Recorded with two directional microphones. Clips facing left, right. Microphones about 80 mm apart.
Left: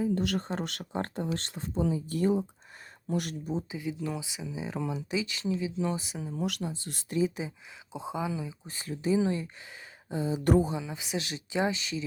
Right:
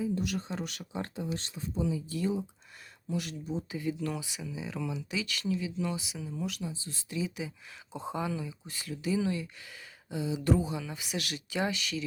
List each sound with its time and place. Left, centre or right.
0.1 s speech: left
0.3 s speech: left
0.9 s speech: left
1.3 s speech: left
1.9 s speech: left
3.7 s speech: centre
6.0 s speech: left
6.4 s speech: left
7.2 s speech: left
7.9 s speech: centre
8.4 s speech: left
10.7 s speech: left